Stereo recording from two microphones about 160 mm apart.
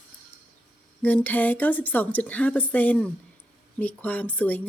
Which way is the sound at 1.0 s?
10° left (ahead or behind).